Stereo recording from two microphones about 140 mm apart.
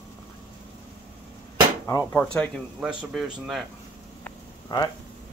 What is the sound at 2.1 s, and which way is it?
Speech, 5° left (ahead or behind).